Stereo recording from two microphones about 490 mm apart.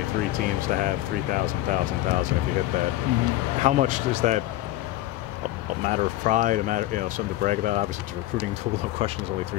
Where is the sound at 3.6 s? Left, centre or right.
Centre.